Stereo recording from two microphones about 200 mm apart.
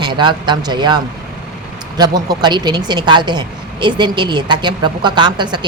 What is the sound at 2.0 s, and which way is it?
Speech, 20° right (ahead or behind).